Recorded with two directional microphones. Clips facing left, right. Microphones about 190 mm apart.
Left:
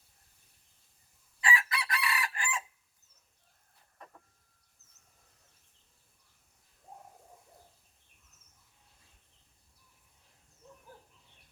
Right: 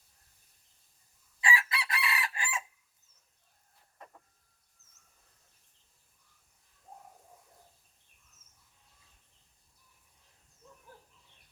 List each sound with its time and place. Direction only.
1.4 s chicken: 25° right (ahead or behind)